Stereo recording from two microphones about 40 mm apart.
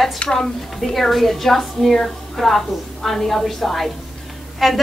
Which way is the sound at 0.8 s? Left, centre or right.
Centre.